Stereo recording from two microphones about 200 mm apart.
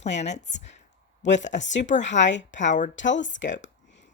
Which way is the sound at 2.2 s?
65° left (ahead or behind).